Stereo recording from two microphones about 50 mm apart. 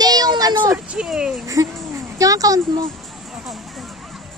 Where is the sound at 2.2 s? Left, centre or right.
Right.